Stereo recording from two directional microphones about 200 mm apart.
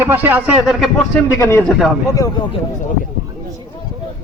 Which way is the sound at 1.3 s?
15° left (ahead or behind).